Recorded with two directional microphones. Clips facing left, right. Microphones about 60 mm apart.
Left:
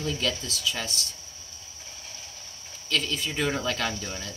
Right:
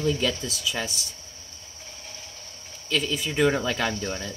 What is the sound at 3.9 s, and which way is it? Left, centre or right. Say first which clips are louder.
Speech: right 5 dB; right.